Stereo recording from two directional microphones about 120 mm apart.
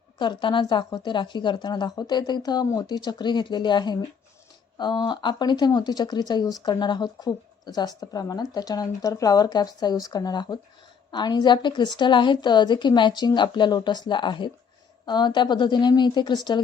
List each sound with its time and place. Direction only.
0.2 s speech: 40° left (ahead or behind)